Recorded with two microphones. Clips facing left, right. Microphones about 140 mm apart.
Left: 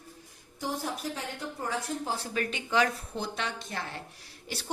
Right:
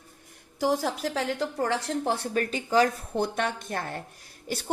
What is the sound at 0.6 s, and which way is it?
A woman's voice, 90° right.